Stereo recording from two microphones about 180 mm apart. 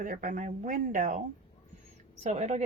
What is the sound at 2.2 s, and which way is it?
Speech, 35° right (ahead or behind).